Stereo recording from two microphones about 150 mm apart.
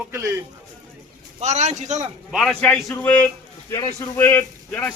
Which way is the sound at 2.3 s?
5° left (ahead or behind).